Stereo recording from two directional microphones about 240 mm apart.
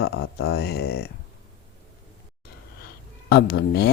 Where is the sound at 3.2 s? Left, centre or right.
Left.